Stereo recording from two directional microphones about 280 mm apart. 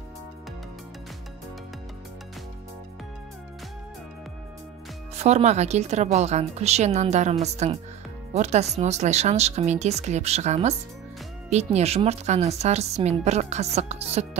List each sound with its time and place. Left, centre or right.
5.1 s speech: right